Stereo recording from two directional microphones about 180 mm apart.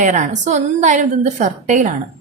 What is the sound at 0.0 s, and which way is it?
A woman's voice, 45° right (ahead or behind).